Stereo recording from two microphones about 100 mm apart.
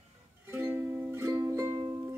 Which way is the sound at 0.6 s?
25° right (ahead or behind).